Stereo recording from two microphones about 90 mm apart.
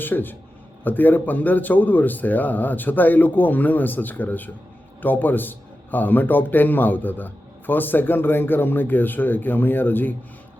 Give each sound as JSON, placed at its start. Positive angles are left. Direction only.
{"t": 0.0, "sound": "a man's voice", "side_deg": 20}